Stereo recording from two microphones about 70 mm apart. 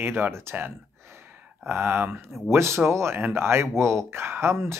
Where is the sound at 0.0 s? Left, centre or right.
Right.